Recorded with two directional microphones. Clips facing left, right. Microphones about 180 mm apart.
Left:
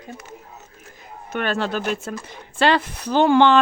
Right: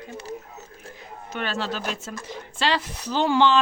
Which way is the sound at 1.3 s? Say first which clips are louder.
Left 5 dB; 55° left (ahead or behind).